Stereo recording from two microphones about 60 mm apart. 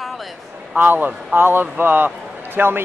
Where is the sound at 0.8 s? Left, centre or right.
Right.